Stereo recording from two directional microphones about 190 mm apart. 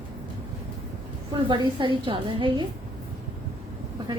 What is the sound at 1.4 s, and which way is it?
A woman's voice, 25° right (ahead or behind).